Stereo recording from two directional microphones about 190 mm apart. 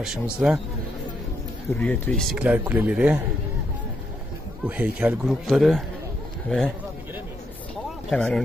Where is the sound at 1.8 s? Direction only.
5° left (ahead or behind).